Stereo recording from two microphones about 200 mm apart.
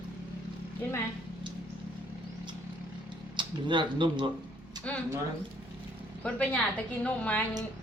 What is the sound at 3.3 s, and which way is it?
Speech, 25° right (ahead or behind).